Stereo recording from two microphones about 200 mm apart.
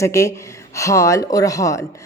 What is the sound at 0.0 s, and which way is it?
Speech, 15° left (ahead or behind).